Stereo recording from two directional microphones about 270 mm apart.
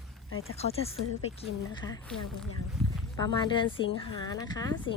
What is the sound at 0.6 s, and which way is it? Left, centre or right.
A woman's voice, left.